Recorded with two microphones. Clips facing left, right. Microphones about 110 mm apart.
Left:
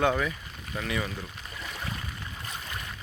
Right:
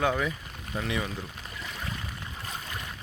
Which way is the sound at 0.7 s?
15° right (ahead or behind).